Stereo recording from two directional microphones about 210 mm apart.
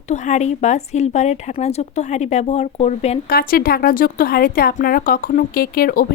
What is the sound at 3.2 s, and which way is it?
Speech, 45° left (ahead or behind).